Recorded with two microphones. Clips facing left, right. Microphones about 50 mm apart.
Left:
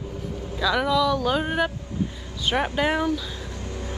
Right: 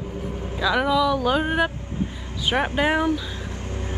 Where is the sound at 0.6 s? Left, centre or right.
Centre.